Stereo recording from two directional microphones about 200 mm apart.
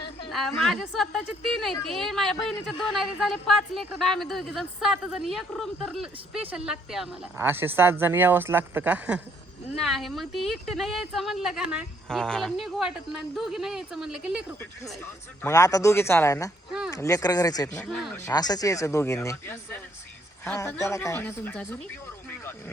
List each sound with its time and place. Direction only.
0.3 s a woman's voice: centre (ahead or behind)
15.4 s speech: 15° left (ahead or behind)
17.7 s a woman's voice: 5° left (ahead or behind)
18.2 s speech: 20° left (ahead or behind)